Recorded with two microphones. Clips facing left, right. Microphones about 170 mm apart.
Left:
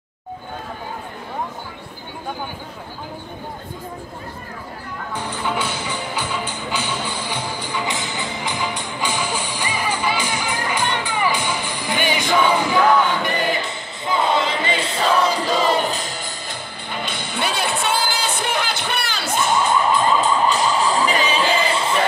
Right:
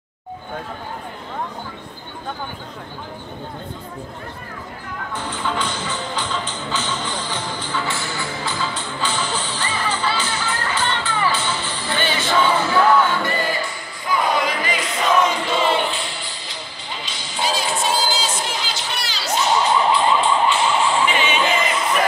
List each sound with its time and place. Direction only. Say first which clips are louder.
5.1 s music: left 1 dB; 10° left (ahead or behind); by 22.0 s 30° left (ahead or behind)